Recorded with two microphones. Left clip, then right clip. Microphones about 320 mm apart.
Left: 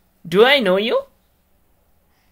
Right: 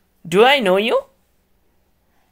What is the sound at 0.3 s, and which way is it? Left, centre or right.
Speech, centre.